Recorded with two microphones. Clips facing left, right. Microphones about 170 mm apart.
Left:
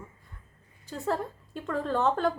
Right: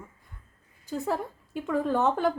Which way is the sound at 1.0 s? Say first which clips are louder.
Left 2 dB; 10° right (ahead or behind).